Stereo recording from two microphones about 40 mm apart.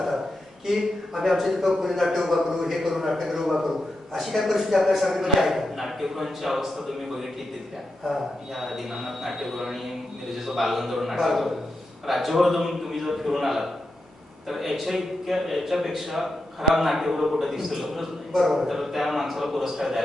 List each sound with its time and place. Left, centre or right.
0.8 s a man's voice: centre